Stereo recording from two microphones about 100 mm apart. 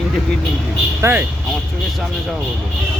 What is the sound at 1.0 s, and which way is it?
Speech, 20° right (ahead or behind).